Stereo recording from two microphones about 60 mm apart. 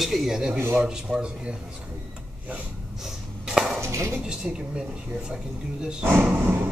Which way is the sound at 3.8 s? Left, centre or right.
Right.